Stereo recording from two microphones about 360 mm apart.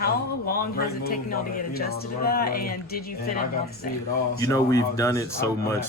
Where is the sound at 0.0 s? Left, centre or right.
Left.